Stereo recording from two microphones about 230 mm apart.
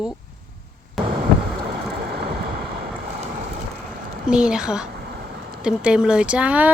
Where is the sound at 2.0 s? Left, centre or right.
Right.